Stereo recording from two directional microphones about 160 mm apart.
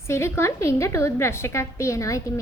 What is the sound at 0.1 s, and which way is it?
A woman's voice, 15° left (ahead or behind).